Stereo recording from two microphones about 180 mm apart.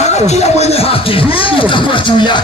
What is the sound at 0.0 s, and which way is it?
Speech, 40° left (ahead or behind).